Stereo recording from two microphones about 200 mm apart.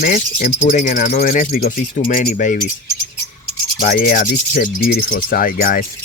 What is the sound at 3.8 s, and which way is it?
Cricket, 45° left (ahead or behind).